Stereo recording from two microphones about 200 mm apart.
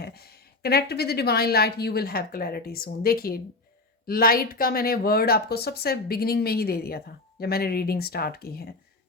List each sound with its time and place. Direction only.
0.0 s speech: 50° left (ahead or behind)